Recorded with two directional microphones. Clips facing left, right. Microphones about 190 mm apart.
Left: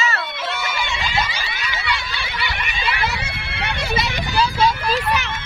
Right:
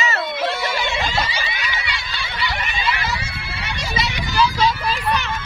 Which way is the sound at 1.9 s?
60° left (ahead or behind).